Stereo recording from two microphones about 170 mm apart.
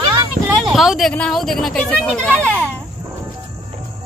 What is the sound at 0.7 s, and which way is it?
Speech, centre (ahead or behind).